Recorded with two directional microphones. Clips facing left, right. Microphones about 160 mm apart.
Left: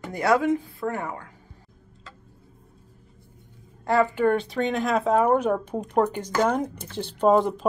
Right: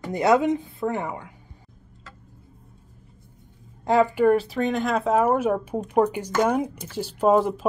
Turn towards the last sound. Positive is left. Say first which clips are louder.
# even
turn(degrees=-5)  # may be behind; listen again after turning